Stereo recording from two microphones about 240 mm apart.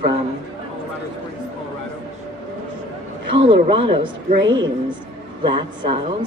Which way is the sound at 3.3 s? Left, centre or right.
Right.